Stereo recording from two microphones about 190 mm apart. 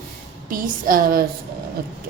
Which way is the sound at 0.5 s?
45° right (ahead or behind).